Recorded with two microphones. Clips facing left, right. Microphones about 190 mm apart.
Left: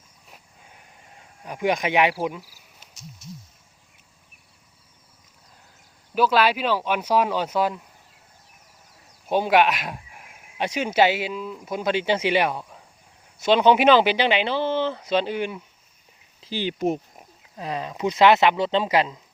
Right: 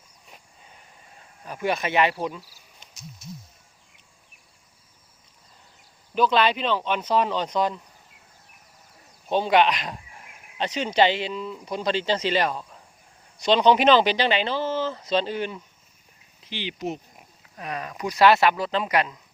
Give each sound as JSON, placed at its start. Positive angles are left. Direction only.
{"t": 1.5, "sound": "speech", "side_deg": 15}
{"t": 2.8, "sound": "a sound", "side_deg": 5}
{"t": 6.1, "sound": "speech", "side_deg": 5}
{"t": 9.3, "sound": "speech", "side_deg": 10}
{"t": 16.4, "sound": "speech", "side_deg": 40}
{"t": 17.6, "sound": "speech", "side_deg": 25}